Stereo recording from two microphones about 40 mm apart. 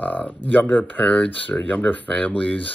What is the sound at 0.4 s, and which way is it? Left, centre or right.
Speech, left.